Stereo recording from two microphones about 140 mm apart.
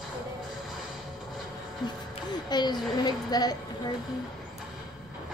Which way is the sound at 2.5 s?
30° left (ahead or behind).